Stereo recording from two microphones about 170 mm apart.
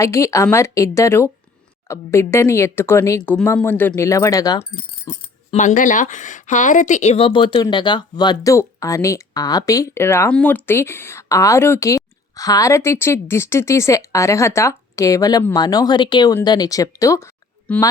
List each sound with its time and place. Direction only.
0.0 s speech: 20° left (ahead or behind)
5.5 s speech: 45° left (ahead or behind); by 17.2 s 20° left (ahead or behind)
17.7 s speech: 10° left (ahead or behind)